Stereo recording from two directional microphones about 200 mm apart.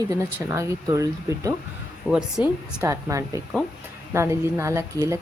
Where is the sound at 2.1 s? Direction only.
Centre (ahead or behind).